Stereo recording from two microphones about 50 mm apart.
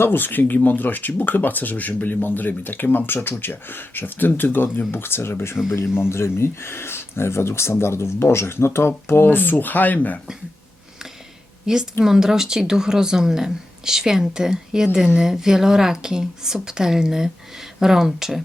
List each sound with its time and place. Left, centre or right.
0.0 s speech: left
11.6 s a woman's voice: centre